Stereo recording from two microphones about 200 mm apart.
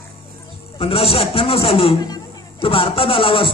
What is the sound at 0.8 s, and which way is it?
Speech, 30° left (ahead or behind).